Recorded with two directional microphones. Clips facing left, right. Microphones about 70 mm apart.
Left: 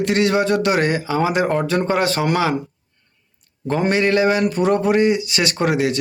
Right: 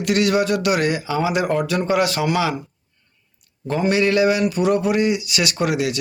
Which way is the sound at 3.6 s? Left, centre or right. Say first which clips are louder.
Left 1 dB; left.